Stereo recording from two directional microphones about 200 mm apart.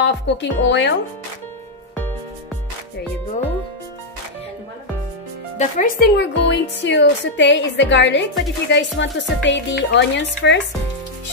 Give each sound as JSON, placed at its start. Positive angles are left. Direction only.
{"t": 0.0, "sound": "a woman's voice", "side_deg": 60}
{"t": 5.6, "sound": "speech", "side_deg": 40}
{"t": 6.1, "sound": "a woman's voice", "side_deg": 65}